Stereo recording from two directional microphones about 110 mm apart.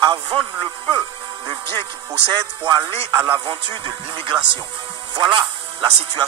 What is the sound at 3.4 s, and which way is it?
Music, 45° right (ahead or behind).